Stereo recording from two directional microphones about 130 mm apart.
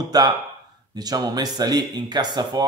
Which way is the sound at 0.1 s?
30° right (ahead or behind).